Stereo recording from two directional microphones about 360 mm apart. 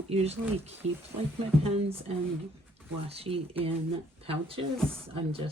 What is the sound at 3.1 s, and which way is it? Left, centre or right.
Speech, centre.